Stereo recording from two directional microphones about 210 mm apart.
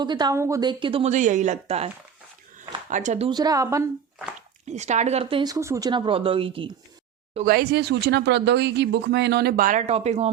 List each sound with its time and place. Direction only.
0.0 s speech: 20° right (ahead or behind)
2.6 s a sound: 35° right (ahead or behind)
3.2 s a woman's voice: 20° right (ahead or behind)
4.4 s speech: 35° right (ahead or behind)
7.4 s speech: 50° right (ahead or behind); by 10.3 s 30° right (ahead or behind)